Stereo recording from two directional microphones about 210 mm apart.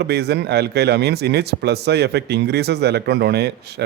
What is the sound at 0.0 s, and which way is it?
A man's voice, 50° right (ahead or behind).